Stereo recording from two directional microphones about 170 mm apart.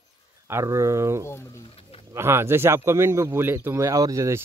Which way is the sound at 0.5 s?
15° right (ahead or behind).